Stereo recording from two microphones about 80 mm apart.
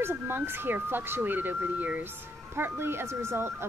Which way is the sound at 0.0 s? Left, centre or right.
Right.